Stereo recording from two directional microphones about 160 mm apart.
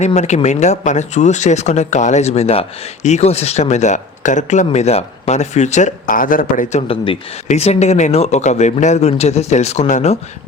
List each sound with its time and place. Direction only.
0.0 s speech: 45° left (ahead or behind)